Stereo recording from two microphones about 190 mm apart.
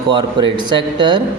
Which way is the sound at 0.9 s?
25° right (ahead or behind).